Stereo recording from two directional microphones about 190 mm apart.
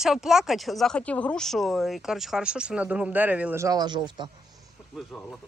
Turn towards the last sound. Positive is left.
turn(degrees=0)  # may be behind; listen again after turning